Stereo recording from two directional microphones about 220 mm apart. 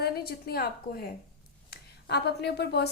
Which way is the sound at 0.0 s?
45° left (ahead or behind).